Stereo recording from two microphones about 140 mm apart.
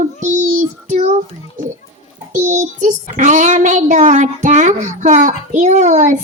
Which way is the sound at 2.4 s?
60° right (ahead or behind).